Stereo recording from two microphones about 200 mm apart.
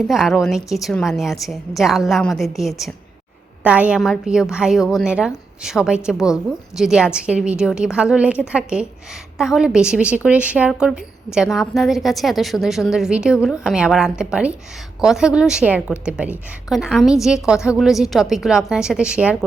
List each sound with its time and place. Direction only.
0.1 s a woman's voice: centre (ahead or behind)